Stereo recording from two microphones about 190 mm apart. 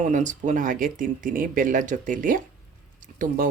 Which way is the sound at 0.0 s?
40° right (ahead or behind).